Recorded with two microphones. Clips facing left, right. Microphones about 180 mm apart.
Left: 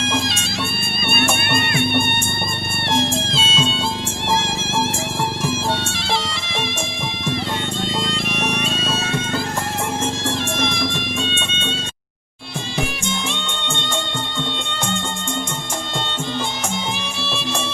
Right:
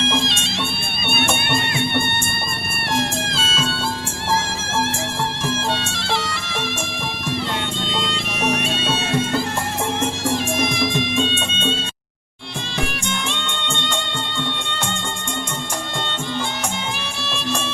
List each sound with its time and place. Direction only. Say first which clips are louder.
0.0 s music: right 1 dB; centre (ahead or behind)
1.8 s music: left 2 dB; 15° left (ahead or behind)
2.9 s music: left 2 dB; 25° left (ahead or behind)
5.4 s music: left 1 dB; 15° left (ahead or behind)
7.9 s bagpipes: left 2 dB; centre (ahead or behind)
17.0 s music: left 1 dB; 10° left (ahead or behind)